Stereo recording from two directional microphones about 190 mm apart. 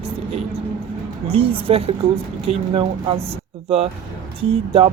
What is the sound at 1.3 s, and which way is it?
Speech, 30° right (ahead or behind).